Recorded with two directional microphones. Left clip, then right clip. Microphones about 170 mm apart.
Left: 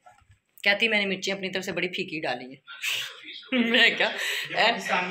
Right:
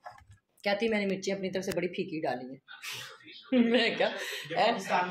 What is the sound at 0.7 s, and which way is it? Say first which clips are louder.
A man's voice: left 6 dB; 20° right (ahead or behind).